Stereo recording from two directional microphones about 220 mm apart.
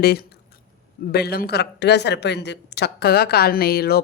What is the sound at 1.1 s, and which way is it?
A woman's voice, 45° left (ahead or behind).